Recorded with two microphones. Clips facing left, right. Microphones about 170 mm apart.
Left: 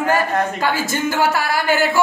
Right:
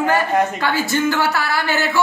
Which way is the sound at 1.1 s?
45° left (ahead or behind).